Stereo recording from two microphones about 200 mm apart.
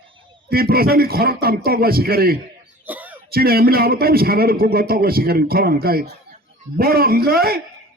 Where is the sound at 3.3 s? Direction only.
50° right (ahead or behind).